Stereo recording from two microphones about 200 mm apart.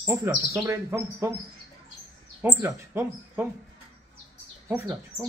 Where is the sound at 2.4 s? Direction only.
10° right (ahead or behind).